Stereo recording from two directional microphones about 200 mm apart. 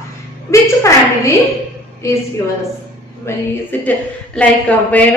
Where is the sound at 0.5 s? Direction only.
15° left (ahead or behind).